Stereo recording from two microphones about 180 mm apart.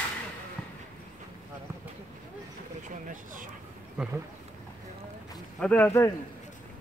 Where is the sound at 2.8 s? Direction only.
45° right (ahead or behind).